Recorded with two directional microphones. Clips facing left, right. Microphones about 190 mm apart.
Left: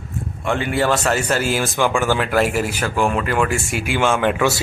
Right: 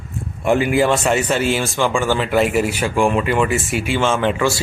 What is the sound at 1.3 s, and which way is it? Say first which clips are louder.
Speech: right 1 dB; 5° left (ahead or behind).